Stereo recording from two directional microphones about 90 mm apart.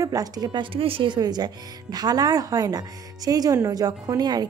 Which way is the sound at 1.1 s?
50° right (ahead or behind).